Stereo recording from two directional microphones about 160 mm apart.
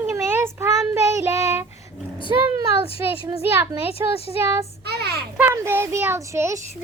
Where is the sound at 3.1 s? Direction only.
15° right (ahead or behind).